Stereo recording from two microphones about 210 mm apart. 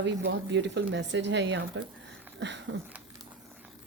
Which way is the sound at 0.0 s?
55° right (ahead or behind).